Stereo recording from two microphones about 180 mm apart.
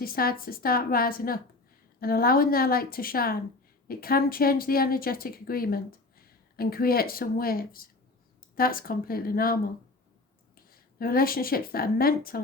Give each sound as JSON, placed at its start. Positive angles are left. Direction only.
{"t": 0.0, "sound": "speech", "side_deg": 55}
{"t": 11.0, "sound": "speech", "side_deg": 55}